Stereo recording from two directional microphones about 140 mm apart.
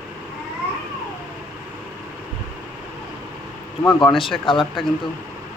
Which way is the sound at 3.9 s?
35° left (ahead or behind).